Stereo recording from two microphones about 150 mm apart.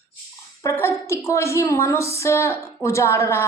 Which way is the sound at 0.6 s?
15° left (ahead or behind).